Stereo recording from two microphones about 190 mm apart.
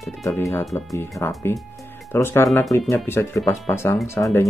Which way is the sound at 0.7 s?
Centre (ahead or behind).